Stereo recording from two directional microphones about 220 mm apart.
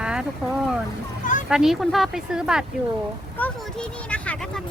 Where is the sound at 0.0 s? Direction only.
5° right (ahead or behind).